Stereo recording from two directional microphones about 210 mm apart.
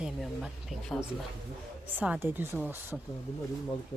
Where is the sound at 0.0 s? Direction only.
Centre (ahead or behind).